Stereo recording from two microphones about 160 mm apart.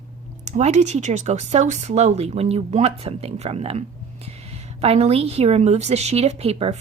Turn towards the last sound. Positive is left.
turn(degrees=-40)  # may be behind; listen again after turning